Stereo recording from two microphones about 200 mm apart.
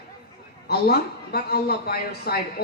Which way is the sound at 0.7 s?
55° left (ahead or behind).